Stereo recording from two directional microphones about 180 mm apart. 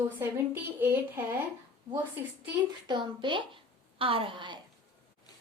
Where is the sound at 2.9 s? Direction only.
25° right (ahead or behind).